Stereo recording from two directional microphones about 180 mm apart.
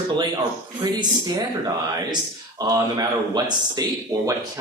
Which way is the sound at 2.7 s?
20° right (ahead or behind).